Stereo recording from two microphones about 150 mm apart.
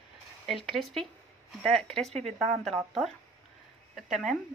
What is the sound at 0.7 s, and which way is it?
A woman's voice, centre (ahead or behind).